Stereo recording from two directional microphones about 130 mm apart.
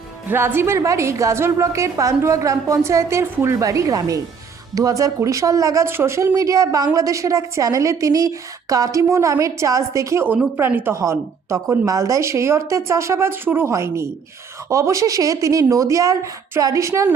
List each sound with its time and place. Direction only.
0.3 s speech: 20° right (ahead or behind)